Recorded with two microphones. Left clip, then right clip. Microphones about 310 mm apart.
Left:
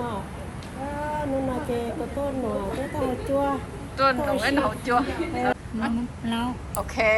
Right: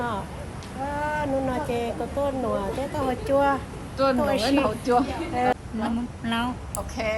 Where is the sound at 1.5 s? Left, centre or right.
Centre.